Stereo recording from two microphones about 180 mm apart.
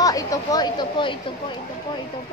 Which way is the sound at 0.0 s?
20° left (ahead or behind).